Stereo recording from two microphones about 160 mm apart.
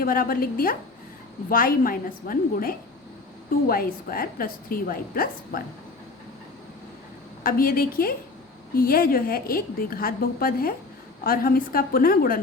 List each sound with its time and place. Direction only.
0.0 s a woman's voice: 65° left (ahead or behind)
7.4 s a woman's voice: 65° left (ahead or behind)